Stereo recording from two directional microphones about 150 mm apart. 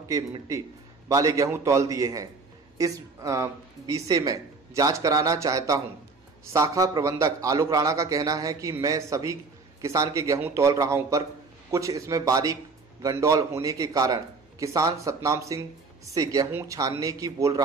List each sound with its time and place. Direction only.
0.1 s a man's voice: 20° right (ahead or behind)